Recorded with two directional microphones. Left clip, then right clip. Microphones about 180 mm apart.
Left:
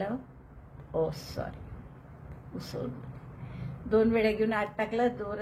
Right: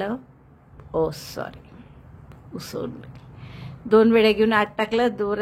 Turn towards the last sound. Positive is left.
turn(degrees=-40)  # may be behind; listen again after turning